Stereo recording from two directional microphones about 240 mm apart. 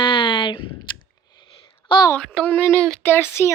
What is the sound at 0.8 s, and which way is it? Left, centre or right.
Clicking, centre.